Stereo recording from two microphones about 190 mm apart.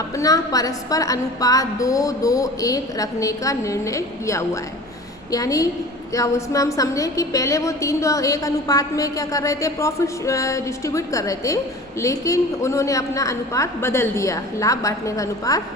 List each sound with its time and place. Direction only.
0.2 s a woman's voice: 20° left (ahead or behind)